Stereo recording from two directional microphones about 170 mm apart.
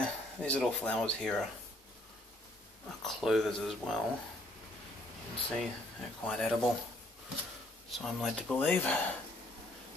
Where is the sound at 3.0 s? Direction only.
Centre (ahead or behind).